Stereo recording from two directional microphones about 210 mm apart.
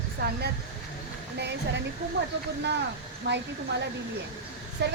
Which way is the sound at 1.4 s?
55° right (ahead or behind).